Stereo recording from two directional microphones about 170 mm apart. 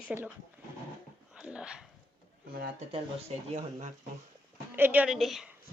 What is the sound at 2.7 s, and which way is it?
Speech, 40° right (ahead or behind).